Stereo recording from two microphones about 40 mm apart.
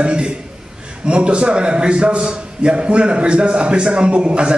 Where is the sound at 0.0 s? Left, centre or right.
Right.